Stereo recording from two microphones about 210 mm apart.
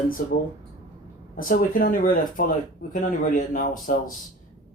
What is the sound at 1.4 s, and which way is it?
Speech, 40° left (ahead or behind).